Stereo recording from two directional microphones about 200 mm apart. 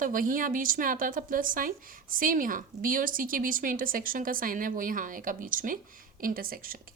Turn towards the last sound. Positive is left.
turn(degrees=-45)  # may be behind; listen again after turning